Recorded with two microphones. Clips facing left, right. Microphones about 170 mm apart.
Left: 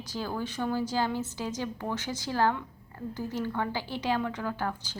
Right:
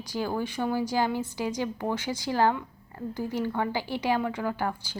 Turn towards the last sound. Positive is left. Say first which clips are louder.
# right 3 dB
turn(degrees=-10)  # may be behind; listen again after turning